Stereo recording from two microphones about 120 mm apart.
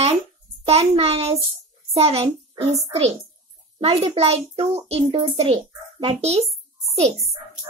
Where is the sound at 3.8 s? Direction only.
55° right (ahead or behind).